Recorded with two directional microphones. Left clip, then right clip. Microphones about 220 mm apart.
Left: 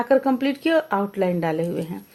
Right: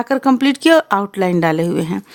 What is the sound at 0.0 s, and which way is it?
Speech, 40° right (ahead or behind).